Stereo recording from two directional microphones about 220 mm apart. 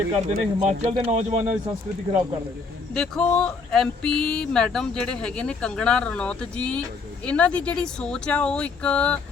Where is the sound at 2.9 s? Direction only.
5° left (ahead or behind).